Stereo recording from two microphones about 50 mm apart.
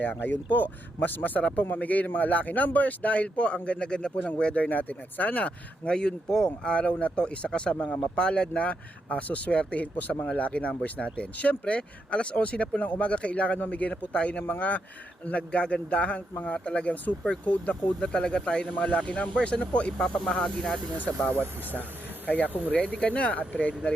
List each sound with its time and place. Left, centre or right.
0.0 s speech: left; by 6.5 s centre
6.7 s speech: left
21.0 s speech: left